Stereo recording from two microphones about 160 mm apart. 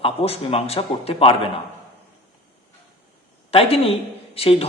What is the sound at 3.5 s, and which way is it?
Speech, 35° left (ahead or behind).